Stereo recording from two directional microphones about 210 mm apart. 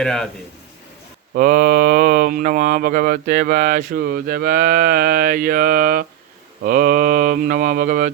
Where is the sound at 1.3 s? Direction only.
45° right (ahead or behind).